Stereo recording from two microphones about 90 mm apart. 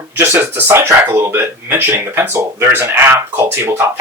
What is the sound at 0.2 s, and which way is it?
Speech, 25° right (ahead or behind).